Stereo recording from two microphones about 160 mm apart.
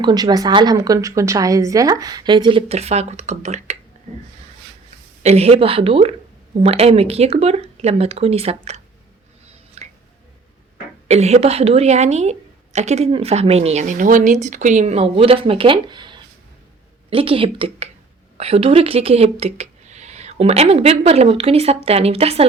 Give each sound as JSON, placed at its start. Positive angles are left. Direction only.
{"t": 0.0, "sound": "a woman's voice", "side_deg": -25}
{"t": 5.2, "sound": "speech", "side_deg": -40}
{"t": 9.8, "sound": "a sound", "side_deg": -45}
{"t": 11.1, "sound": "a woman's voice", "side_deg": -45}